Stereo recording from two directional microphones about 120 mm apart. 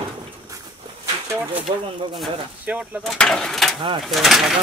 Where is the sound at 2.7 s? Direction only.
10° right (ahead or behind).